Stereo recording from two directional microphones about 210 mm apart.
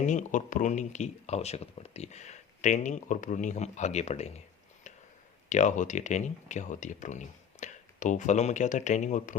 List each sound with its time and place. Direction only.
0.0 s speech: 35° left (ahead or behind)
5.5 s speech: 35° left (ahead or behind)